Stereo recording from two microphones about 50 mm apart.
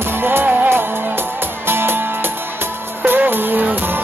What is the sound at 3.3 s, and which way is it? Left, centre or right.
Music, right.